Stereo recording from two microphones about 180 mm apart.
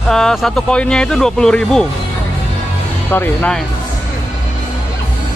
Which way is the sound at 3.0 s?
10° left (ahead or behind).